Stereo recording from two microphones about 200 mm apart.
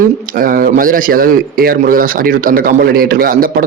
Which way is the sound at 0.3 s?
45° right (ahead or behind).